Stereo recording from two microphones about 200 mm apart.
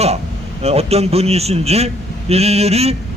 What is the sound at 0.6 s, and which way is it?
A man's voice, 30° right (ahead or behind).